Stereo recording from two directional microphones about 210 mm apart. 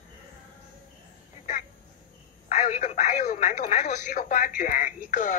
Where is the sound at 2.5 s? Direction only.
40° left (ahead or behind).